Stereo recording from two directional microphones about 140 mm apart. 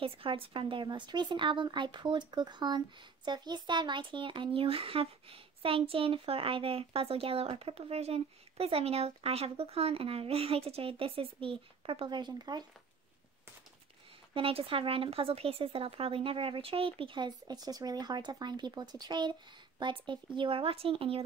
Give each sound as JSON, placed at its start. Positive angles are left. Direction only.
{"t": 0.0, "sound": "speech", "side_deg": -40}
{"t": 14.3, "sound": "speech", "side_deg": -40}